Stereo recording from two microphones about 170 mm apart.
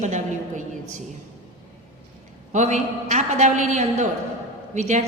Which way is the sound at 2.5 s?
45° right (ahead or behind).